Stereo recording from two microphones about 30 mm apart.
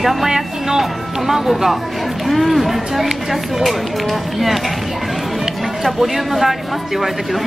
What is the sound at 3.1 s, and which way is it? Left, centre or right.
Speech, centre.